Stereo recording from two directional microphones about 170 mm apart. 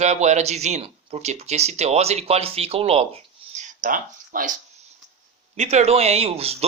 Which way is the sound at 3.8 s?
50° right (ahead or behind).